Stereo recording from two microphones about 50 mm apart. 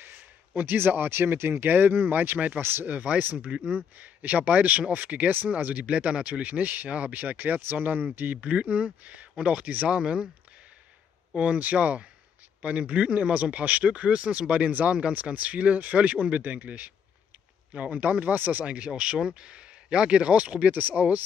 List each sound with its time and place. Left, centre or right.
0.6 s speech: right
2.6 s speech: right
3.2 s speech: right
9.8 s speech: centre
11.3 s speech: right
18.7 s speech: right